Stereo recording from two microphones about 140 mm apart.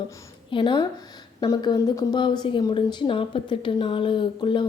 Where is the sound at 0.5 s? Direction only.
35° left (ahead or behind).